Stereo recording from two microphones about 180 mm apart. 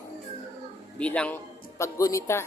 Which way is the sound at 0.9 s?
5° left (ahead or behind).